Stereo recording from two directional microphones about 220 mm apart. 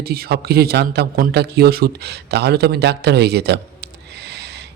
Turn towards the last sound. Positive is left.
turn(degrees=-50)  # may be behind; listen again after turning